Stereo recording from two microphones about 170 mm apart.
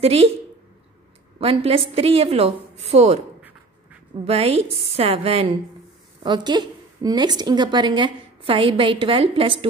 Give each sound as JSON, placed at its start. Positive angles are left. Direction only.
{"t": 0.0, "sound": "a woman's voice", "side_deg": -35}
{"t": 1.4, "sound": "a woman's voice", "side_deg": -35}
{"t": 4.2, "sound": "a woman's voice", "side_deg": -35}